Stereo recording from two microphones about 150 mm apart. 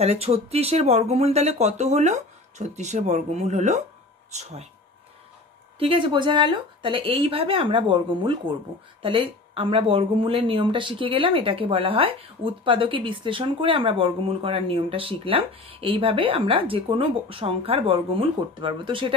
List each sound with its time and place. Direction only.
0.0 s speech: 45° right (ahead or behind)
5.8 s speech: 35° right (ahead or behind)